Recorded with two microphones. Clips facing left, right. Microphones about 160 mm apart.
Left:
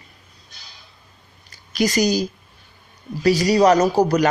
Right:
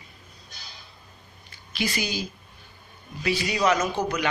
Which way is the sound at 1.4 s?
40° left (ahead or behind).